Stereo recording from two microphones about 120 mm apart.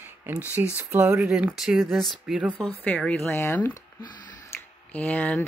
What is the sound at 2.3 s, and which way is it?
Speech, 10° right (ahead or behind).